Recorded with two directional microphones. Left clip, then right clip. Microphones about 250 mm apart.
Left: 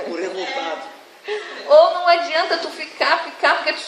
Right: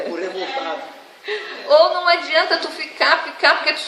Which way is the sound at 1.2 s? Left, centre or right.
Right.